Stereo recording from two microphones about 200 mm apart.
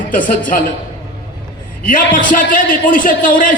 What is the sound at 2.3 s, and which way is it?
A man's voice, 45° left (ahead or behind).